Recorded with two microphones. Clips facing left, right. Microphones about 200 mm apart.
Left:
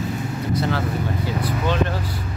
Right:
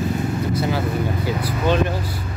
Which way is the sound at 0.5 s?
10° right (ahead or behind).